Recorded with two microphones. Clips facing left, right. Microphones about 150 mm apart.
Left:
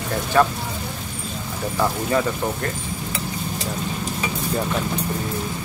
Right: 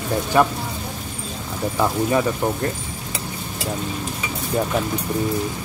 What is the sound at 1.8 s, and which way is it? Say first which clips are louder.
Speech: right 2 dB; 15° right (ahead or behind).